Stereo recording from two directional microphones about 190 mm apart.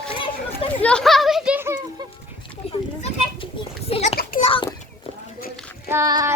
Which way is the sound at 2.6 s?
30° left (ahead or behind).